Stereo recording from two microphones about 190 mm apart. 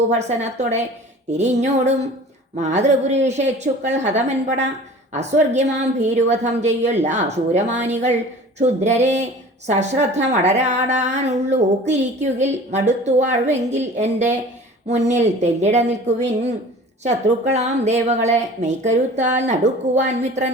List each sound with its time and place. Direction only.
0.3 s speech: 35° right (ahead or behind)